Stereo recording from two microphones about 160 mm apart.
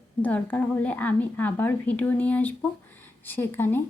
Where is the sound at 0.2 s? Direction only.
10° left (ahead or behind).